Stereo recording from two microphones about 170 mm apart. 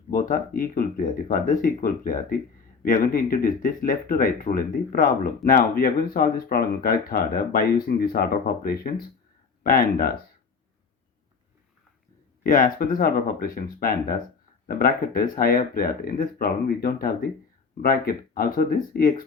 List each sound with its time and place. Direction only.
0.1 s speech: 60° left (ahead or behind)
12.4 s speech: 55° left (ahead or behind)